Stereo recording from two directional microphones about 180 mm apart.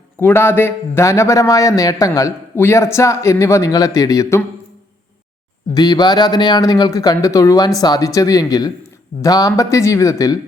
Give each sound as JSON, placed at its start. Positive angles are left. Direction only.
{"t": 0.2, "sound": "speech", "side_deg": 10}
{"t": 5.7, "sound": "speech", "side_deg": 20}